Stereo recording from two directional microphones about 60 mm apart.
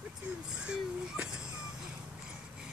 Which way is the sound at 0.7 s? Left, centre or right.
Centre.